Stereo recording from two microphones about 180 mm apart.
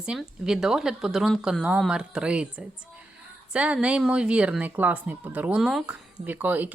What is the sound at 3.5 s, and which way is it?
Speech, 5° right (ahead or behind).